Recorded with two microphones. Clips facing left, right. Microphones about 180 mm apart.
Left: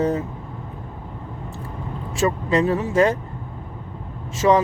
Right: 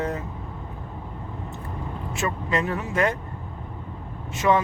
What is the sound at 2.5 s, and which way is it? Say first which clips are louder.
Speech: left 5 dB; 30° left (ahead or behind).